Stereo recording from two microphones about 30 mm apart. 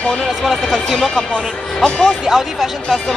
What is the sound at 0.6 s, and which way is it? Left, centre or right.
Speech, centre.